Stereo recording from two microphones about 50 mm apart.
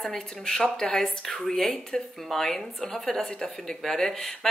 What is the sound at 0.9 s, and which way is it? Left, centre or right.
A woman's voice, centre.